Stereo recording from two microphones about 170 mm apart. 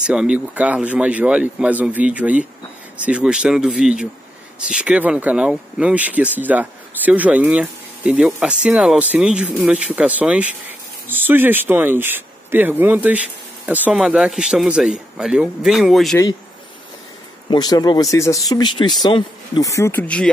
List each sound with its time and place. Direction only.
0.0 s a man's voice: 5° right (ahead or behind)
17.5 s speech: 25° left (ahead or behind)